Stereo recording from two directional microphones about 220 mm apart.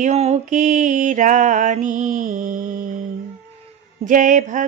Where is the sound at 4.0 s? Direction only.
35° right (ahead or behind).